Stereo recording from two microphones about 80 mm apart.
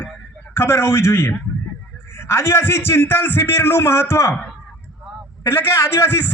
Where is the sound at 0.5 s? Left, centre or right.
Left.